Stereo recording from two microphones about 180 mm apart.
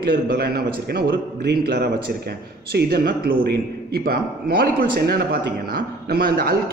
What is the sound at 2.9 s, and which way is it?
A man's voice, 55° right (ahead or behind).